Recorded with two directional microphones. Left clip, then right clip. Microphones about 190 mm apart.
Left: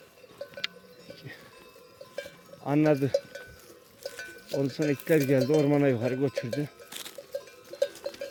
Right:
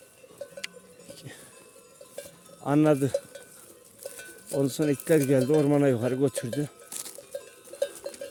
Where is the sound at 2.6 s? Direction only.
30° right (ahead or behind).